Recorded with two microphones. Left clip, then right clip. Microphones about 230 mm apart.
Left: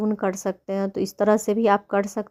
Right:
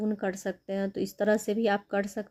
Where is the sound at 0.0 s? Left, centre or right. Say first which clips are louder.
Left 7 dB; centre.